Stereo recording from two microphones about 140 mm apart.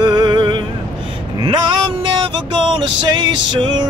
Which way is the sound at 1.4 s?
35° right (ahead or behind).